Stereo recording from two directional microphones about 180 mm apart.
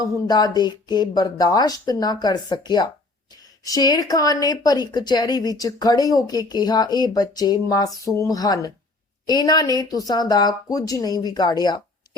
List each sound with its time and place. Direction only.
0.0 s speech: 20° left (ahead or behind)